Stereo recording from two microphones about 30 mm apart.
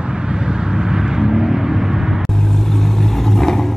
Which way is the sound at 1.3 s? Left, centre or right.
Centre.